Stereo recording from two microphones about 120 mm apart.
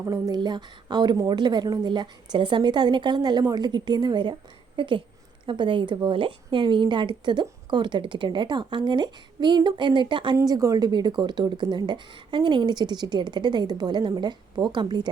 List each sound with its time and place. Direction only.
0.0 s speech: 25° right (ahead or behind)
0.3 s a woman's voice: 40° right (ahead or behind)
10.3 s speech: 25° right (ahead or behind)